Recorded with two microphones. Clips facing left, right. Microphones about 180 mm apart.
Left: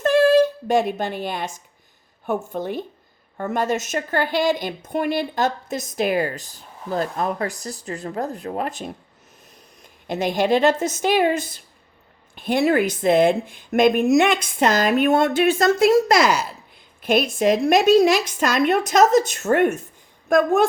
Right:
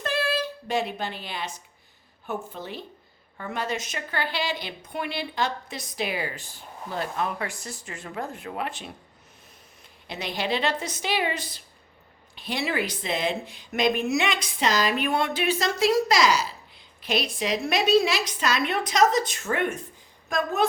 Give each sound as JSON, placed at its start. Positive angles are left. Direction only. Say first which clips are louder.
{"t": 0.0, "sound": "a sound", "louder": "left 13 dB", "side_deg": 45}
{"t": 2.2, "sound": "a woman's voice", "louder": "left 9 dB", "side_deg": 50}
{"t": 10.1, "sound": "a woman's voice", "louder": "left 9 dB", "side_deg": 45}